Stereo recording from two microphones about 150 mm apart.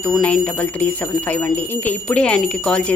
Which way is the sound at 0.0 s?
5° left (ahead or behind).